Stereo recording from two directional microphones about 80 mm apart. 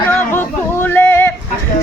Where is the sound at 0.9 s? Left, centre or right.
Left.